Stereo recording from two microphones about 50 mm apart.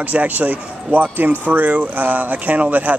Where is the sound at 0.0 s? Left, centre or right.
Right.